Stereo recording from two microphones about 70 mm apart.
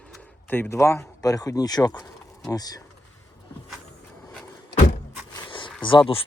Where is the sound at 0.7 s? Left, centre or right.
Left.